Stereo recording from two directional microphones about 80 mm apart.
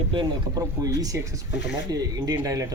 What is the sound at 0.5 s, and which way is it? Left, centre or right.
Speech, right.